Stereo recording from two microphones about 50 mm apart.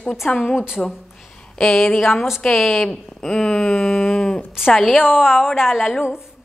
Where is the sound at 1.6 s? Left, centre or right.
Centre.